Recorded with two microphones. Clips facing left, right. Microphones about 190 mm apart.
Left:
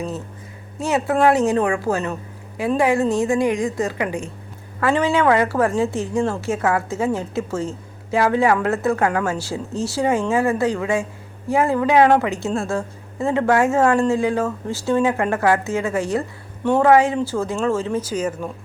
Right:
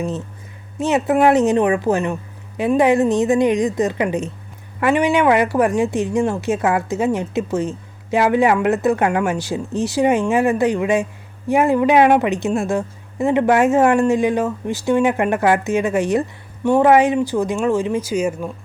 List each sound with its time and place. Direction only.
0.8 s a woman's voice: 20° right (ahead or behind)